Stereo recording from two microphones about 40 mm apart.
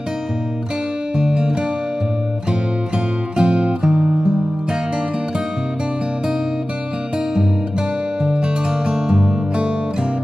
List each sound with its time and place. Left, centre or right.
1.1 s music: right
3.3 s music: right
8.2 s music: right